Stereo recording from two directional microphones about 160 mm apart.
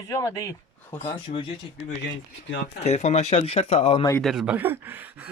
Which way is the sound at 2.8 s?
45° left (ahead or behind).